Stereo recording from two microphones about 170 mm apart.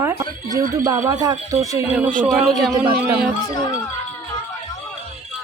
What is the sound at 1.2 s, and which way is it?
Speech, 20° right (ahead or behind).